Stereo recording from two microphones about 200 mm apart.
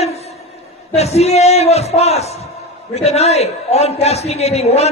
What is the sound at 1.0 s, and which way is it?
A man's voice, 30° left (ahead or behind).